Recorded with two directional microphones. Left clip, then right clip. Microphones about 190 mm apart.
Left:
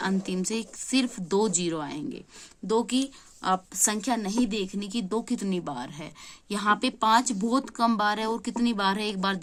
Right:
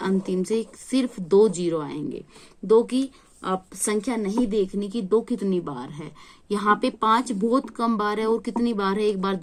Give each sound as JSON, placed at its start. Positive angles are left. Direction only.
{"t": 0.0, "sound": "a woman's voice", "side_deg": 30}